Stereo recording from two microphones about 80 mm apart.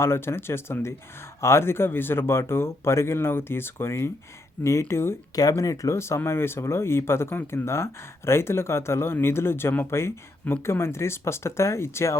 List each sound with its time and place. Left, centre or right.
0.0 s speech: left
5.3 s speech: left